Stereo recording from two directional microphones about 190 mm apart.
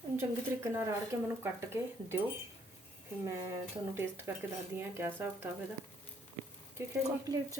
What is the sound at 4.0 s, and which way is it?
Speech, 10° right (ahead or behind).